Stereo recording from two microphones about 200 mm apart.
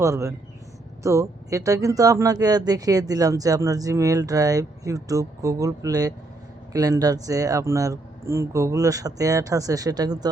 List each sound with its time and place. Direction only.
0.0 s speech: 15° right (ahead or behind)